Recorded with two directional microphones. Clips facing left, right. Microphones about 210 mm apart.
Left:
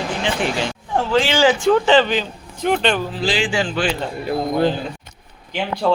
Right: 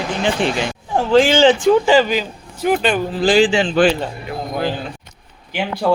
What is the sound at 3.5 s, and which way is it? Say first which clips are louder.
Speech: right 4 dB; 20° right (ahead or behind).